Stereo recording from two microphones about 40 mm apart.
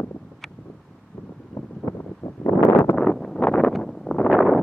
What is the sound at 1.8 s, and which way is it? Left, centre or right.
Wind noise, left.